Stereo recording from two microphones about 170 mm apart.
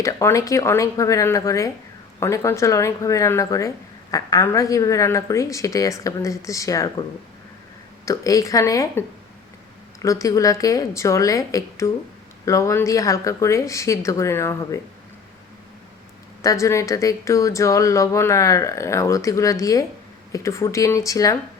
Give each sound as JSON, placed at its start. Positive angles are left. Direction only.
{"t": 0.0, "sound": "a woman's voice", "side_deg": 15}
{"t": 8.0, "sound": "a woman's voice", "side_deg": 20}
{"t": 16.4, "sound": "speech", "side_deg": 20}